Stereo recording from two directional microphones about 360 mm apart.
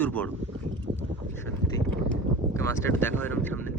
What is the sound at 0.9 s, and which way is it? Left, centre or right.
Speech, right.